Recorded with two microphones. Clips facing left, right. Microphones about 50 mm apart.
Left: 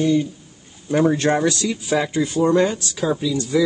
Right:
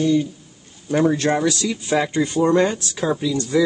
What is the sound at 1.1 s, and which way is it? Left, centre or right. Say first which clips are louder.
Speech: left 1 dB; left.